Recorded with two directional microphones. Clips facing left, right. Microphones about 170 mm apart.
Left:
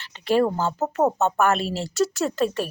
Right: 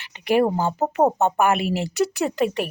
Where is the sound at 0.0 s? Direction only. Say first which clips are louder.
Right 1 dB; 15° right (ahead or behind).